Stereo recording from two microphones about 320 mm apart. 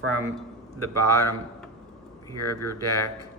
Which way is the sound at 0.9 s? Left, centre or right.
Right.